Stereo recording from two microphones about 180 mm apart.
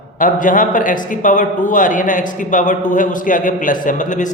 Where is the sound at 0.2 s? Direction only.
45° left (ahead or behind).